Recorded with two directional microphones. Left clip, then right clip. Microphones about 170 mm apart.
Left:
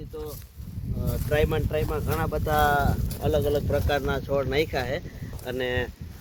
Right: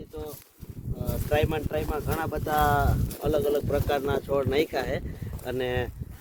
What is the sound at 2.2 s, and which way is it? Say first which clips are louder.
Speech: left 2 dB; 25° right (ahead or behind).